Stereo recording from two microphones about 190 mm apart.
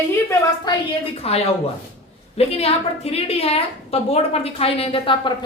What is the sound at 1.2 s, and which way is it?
A woman's voice, 30° left (ahead or behind).